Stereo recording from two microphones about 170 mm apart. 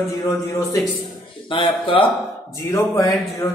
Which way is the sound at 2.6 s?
20° left (ahead or behind).